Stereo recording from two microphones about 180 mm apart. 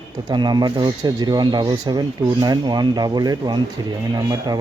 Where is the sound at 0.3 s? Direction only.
25° right (ahead or behind).